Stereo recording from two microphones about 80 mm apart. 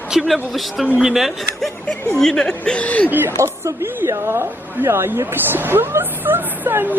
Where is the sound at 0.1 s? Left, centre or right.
Centre.